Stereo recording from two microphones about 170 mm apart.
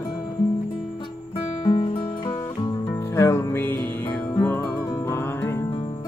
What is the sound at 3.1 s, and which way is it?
Music, 15° left (ahead or behind).